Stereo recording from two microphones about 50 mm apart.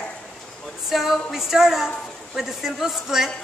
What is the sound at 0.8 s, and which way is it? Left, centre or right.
Speech, centre.